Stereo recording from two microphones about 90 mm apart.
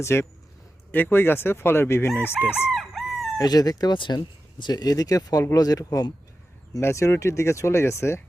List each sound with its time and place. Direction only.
0.0 s speech: 30° left (ahead or behind)
2.7 s chicken: centre (ahead or behind)
3.3 s speech: 45° left (ahead or behind)